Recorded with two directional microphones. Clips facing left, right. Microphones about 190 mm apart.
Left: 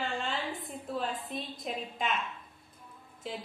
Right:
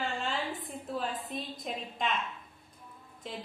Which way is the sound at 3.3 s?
Centre (ahead or behind).